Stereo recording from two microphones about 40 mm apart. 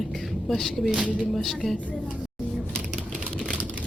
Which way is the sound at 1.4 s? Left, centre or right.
Centre.